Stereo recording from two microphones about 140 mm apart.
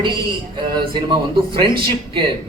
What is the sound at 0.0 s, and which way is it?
A man's voice, 35° right (ahead or behind).